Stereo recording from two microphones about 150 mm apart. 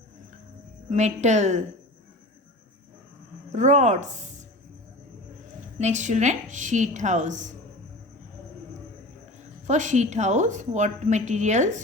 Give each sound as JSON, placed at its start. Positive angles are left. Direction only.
{"t": 0.9, "sound": "a woman's voice", "side_deg": -50}
{"t": 3.5, "sound": "speech", "side_deg": -55}
{"t": 5.8, "sound": "a woman's voice", "side_deg": -55}
{"t": 9.6, "sound": "a woman's voice", "side_deg": -55}